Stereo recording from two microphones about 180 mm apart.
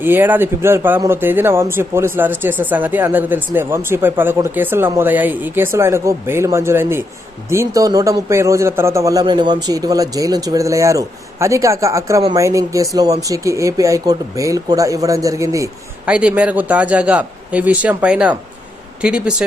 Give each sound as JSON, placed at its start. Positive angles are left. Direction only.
{"t": 0.0, "sound": "speech", "side_deg": -10}
{"t": 16.0, "sound": "speech", "side_deg": -5}